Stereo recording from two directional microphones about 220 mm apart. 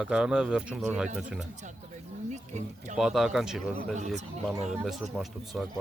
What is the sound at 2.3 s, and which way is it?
Speech, 30° right (ahead or behind).